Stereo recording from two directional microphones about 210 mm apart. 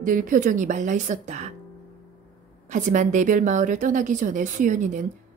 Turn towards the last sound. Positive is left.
turn(degrees=-35)  # may be behind; listen again after turning